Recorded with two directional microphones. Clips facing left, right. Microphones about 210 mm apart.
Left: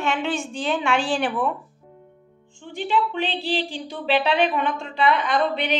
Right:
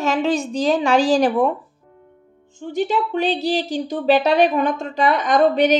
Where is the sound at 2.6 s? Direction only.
40° right (ahead or behind).